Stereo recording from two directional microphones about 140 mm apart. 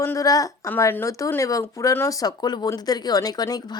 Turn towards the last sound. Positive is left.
turn(degrees=25)  # may be behind; listen again after turning